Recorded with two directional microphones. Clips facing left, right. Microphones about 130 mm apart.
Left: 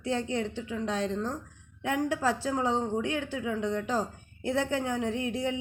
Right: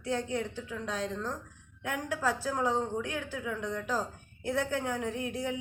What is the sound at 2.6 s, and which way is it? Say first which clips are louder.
A woman's voice: even; 20° left (ahead or behind).